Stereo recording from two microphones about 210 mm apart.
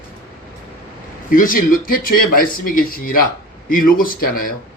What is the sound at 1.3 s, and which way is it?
Speech, 40° left (ahead or behind).